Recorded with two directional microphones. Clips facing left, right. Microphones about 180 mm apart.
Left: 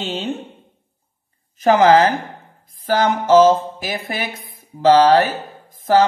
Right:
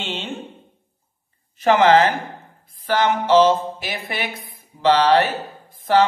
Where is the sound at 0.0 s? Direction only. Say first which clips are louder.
Left 4 dB; 40° left (ahead or behind).